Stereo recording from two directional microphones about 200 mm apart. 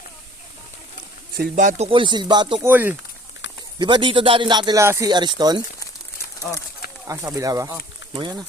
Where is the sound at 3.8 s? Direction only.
25° right (ahead or behind).